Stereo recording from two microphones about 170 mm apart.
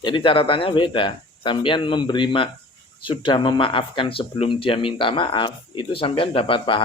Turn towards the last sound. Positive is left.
turn(degrees=30)  # may be behind; listen again after turning